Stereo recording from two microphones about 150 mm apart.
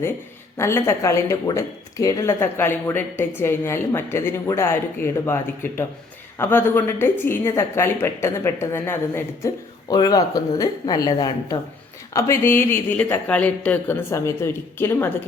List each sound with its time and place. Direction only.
0.5 s speech: 20° left (ahead or behind)